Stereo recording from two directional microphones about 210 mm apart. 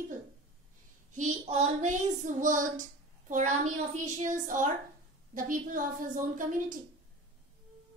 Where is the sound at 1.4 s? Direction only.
30° right (ahead or behind).